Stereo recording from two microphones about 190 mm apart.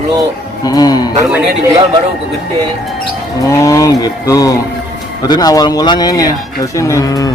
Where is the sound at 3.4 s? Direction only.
15° left (ahead or behind).